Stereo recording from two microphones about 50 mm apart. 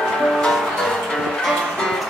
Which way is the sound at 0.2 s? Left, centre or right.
Centre.